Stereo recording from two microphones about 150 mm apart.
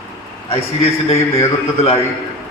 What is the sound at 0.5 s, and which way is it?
A man's voice, 40° left (ahead or behind).